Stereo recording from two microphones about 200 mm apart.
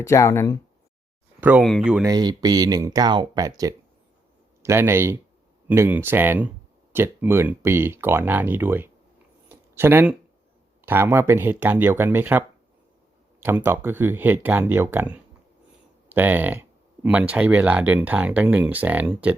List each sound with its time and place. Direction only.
0.0 s speech: 15° left (ahead or behind)
1.4 s speech: 5° right (ahead or behind)
2.0 s speech: 20° right (ahead or behind)
9.5 s a sound: 10° right (ahead or behind)
10.8 s speech: 10° right (ahead or behind)